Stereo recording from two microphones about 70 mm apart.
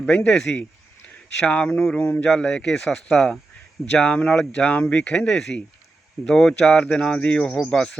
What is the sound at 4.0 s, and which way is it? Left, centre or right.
Speech, centre.